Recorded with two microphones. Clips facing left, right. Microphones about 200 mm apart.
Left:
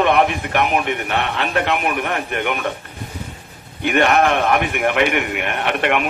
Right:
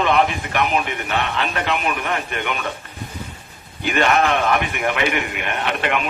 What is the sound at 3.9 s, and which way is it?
A man's voice, 60° left (ahead or behind).